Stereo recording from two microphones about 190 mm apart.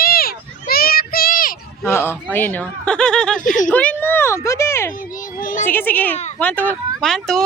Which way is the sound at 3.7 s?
10° left (ahead or behind).